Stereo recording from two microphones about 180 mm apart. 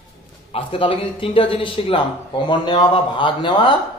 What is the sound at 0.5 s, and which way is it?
A man's voice, 30° left (ahead or behind).